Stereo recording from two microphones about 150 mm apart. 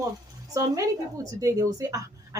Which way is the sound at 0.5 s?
20° right (ahead or behind).